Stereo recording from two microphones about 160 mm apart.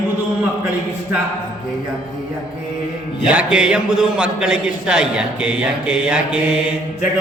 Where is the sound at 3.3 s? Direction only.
5° right (ahead or behind).